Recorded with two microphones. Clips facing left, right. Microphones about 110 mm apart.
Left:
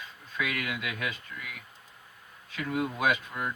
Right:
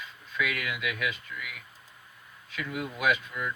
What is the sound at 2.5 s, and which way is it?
Speech, 25° left (ahead or behind).